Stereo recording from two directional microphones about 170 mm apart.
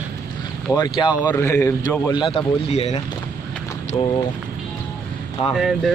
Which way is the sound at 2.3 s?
40° left (ahead or behind).